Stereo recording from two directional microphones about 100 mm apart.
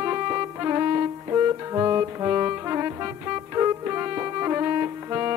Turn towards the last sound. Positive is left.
turn(degrees=-25)  # may be behind; listen again after turning